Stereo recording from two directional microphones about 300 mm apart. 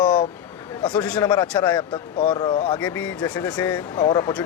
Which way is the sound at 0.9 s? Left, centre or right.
Centre.